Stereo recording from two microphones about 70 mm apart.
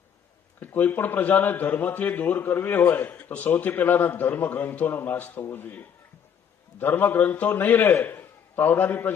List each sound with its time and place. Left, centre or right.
0.6 s a man's voice: left